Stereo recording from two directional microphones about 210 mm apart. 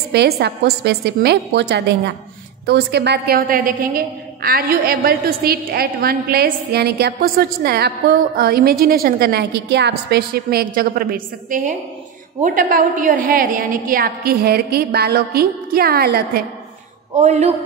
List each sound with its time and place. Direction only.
0.1 s a woman's voice: 50° right (ahead or behind)
17.2 s speech: 30° right (ahead or behind)